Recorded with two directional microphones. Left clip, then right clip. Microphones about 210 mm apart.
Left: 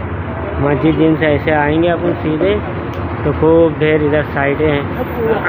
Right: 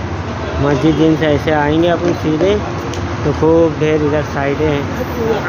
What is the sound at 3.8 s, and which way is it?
Speech, 10° right (ahead or behind).